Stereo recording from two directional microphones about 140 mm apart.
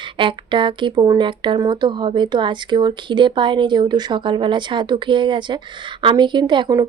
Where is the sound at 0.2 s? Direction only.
35° right (ahead or behind).